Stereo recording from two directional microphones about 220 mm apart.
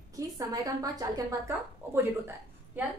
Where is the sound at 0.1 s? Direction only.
15° right (ahead or behind).